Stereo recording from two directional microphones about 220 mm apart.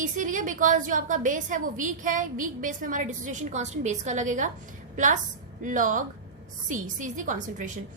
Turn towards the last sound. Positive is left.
turn(degrees=-35)  # may be behind; listen again after turning